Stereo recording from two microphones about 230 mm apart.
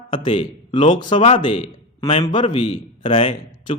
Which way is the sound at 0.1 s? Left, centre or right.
Left.